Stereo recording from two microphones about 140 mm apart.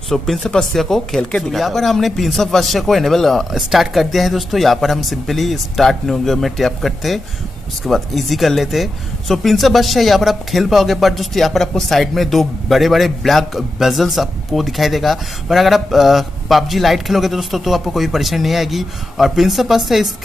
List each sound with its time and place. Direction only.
0.1 s a man's voice: 5° left (ahead or behind)